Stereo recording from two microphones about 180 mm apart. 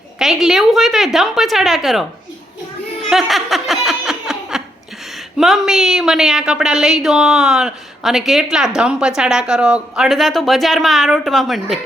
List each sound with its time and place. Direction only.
0.2 s a woman's voice: centre (ahead or behind)
3.0 s snicker: centre (ahead or behind)
5.4 s a woman's voice: centre (ahead or behind)